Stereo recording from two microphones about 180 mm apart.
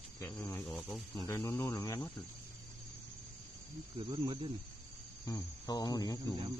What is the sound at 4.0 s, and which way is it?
Speech, 30° right (ahead or behind).